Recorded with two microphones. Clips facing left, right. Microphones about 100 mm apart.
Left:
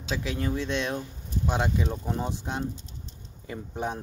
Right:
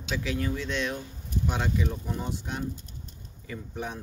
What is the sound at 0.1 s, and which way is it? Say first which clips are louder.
Speech: left 1 dB; 25° left (ahead or behind).